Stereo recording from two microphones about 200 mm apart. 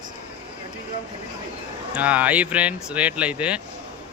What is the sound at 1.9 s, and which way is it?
A man's voice, 5° right (ahead or behind).